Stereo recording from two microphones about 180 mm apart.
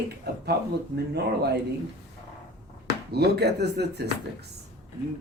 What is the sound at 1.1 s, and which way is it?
Speech, 65° right (ahead or behind).